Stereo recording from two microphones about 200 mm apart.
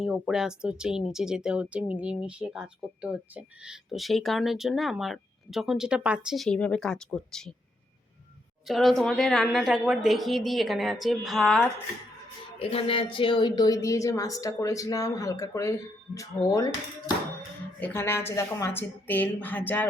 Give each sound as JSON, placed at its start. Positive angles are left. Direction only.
{"t": 0.0, "sound": "speech", "side_deg": -5}
{"t": 8.6, "sound": "speech", "side_deg": 0}
{"t": 12.5, "sound": "a woman's voice", "side_deg": 30}
{"t": 17.7, "sound": "a woman's voice", "side_deg": 10}